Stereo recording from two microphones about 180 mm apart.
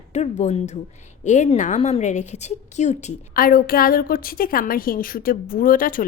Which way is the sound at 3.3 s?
55° left (ahead or behind).